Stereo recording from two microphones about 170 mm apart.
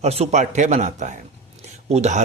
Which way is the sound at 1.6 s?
40° right (ahead or behind).